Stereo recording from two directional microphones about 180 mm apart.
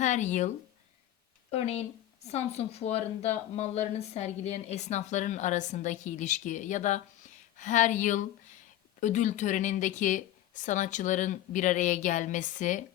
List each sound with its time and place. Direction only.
0.0 s speech: 40° left (ahead or behind)